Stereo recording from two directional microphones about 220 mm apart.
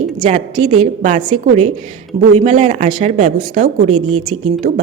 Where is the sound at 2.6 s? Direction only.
35° right (ahead or behind).